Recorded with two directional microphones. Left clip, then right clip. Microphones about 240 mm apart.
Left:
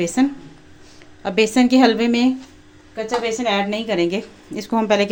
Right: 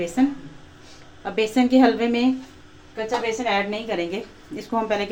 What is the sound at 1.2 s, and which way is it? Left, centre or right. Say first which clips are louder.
A woman's voice: left 5 dB; left.